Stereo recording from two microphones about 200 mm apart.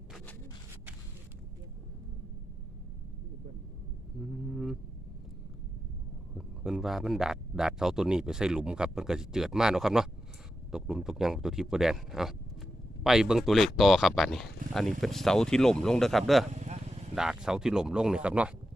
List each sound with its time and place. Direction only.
4.5 s vehicle: centre (ahead or behind)
6.3 s a man's voice: centre (ahead or behind)
16.6 s vehicle: 35° right (ahead or behind)
17.2 s a man's voice: 5° right (ahead or behind)